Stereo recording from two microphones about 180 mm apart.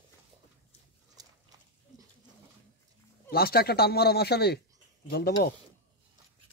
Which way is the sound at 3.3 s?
60° left (ahead or behind).